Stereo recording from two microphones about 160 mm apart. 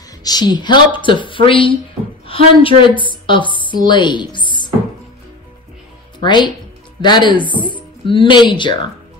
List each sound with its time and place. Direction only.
0.2 s a woman's voice: 25° left (ahead or behind)
6.1 s speech: 30° left (ahead or behind)